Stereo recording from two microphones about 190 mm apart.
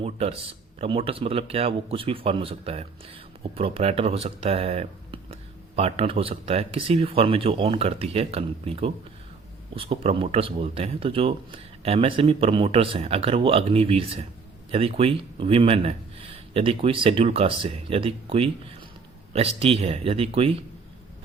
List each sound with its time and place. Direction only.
0.0 s speech: 30° right (ahead or behind)